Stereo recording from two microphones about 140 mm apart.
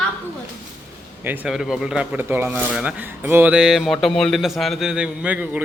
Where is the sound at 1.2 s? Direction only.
15° right (ahead or behind).